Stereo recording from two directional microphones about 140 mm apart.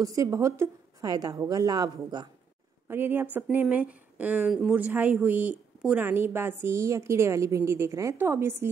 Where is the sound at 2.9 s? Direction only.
15° right (ahead or behind).